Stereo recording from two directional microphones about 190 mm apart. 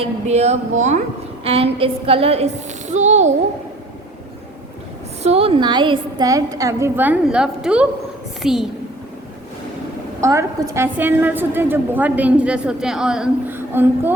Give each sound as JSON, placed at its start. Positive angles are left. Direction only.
{"t": 0.0, "sound": "a woman's voice", "side_deg": -35}
{"t": 5.2, "sound": "a woman's voice", "side_deg": -30}
{"t": 10.2, "sound": "a woman's voice", "side_deg": -15}